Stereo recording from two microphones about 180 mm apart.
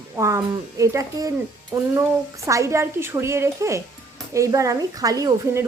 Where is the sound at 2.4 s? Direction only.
15° right (ahead or behind).